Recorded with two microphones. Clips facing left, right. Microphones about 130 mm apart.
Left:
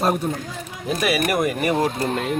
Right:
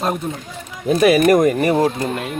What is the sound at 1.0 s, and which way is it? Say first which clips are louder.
Speech: right 9 dB; 45° right (ahead or behind).